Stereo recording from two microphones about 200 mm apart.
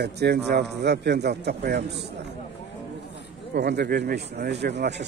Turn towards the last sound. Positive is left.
turn(degrees=-60)  # may be behind; listen again after turning